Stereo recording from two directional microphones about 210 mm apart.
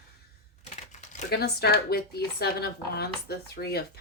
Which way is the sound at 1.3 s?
50° left (ahead or behind).